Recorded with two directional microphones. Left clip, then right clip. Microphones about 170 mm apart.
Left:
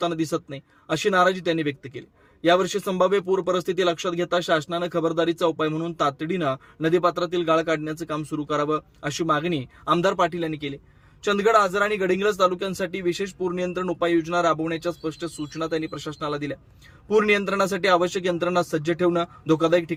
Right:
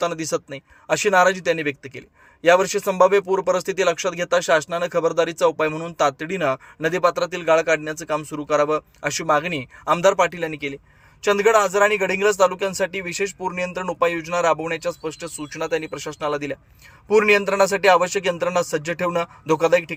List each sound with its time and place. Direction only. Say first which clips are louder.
0.0 s speech: right 2 dB; 15° right (ahead or behind)